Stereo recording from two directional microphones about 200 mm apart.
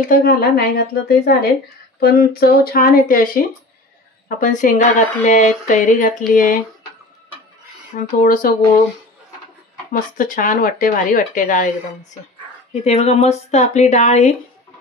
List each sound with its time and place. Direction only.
0.0 s a woman's voice: 50° left (ahead or behind)
7.9 s speech: 45° left (ahead or behind)
9.9 s a woman's voice: 45° left (ahead or behind)